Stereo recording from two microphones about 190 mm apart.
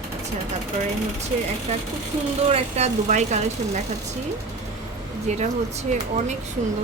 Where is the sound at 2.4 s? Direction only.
30° right (ahead or behind).